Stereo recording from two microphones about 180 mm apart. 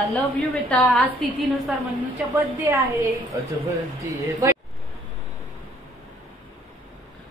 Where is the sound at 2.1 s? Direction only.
15° right (ahead or behind).